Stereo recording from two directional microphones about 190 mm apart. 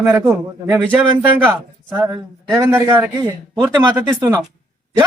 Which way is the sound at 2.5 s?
15° right (ahead or behind).